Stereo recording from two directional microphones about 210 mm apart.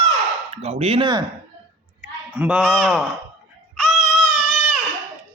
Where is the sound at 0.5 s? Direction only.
30° right (ahead or behind).